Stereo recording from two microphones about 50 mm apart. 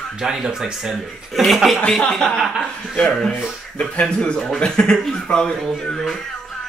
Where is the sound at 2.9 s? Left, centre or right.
Centre.